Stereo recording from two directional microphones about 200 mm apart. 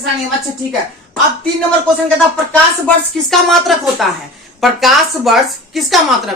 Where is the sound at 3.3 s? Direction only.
Centre (ahead or behind).